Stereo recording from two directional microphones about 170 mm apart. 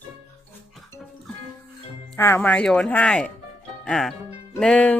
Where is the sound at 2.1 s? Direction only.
15° left (ahead or behind).